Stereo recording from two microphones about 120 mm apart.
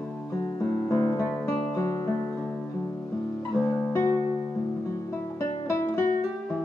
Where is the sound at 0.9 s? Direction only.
25° left (ahead or behind).